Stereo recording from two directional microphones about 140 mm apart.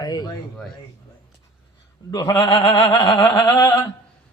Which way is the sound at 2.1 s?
25° left (ahead or behind).